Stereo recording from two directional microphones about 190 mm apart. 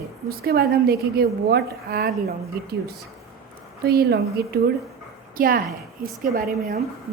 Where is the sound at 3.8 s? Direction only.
55° right (ahead or behind).